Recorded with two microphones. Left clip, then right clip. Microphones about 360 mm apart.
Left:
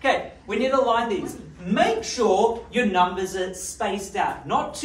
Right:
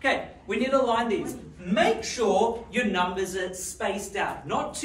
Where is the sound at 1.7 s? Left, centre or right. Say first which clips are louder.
Left 2 dB; centre.